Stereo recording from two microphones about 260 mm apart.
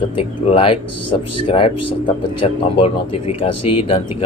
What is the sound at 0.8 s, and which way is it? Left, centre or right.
Speech, left.